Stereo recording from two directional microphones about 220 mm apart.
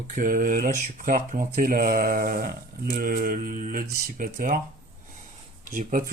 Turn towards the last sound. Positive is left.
turn(degrees=-40)  # may be behind; listen again after turning